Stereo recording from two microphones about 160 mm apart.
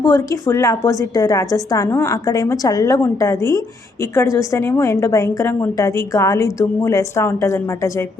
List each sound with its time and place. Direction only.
0.0 s a woman's voice: 20° left (ahead or behind)